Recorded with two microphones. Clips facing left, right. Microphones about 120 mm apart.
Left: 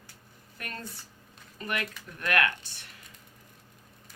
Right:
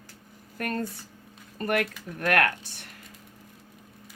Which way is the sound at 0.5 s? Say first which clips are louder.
Right 11 dB; 45° right (ahead or behind).